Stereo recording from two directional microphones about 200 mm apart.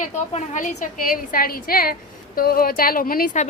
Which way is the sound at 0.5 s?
40° left (ahead or behind).